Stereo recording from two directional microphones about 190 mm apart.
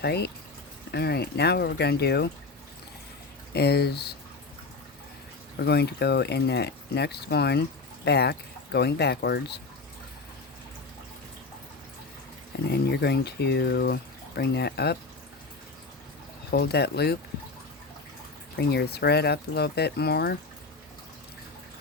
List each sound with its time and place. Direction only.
0.0 s speech: 60° left (ahead or behind)
3.5 s speech: 60° left (ahead or behind)
5.6 s speech: 60° left (ahead or behind)
12.6 s speech: 60° left (ahead or behind)
16.5 s speech: 60° left (ahead or behind)
18.5 s speech: 60° left (ahead or behind)